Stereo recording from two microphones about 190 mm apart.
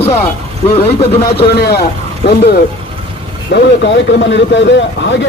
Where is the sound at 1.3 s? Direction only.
55° left (ahead or behind).